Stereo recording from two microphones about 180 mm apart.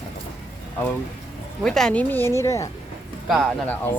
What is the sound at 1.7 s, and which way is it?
A woman's voice, 5° left (ahead or behind).